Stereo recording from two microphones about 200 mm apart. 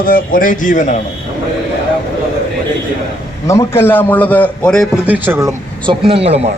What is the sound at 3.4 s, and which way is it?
A man's voice, 15° left (ahead or behind).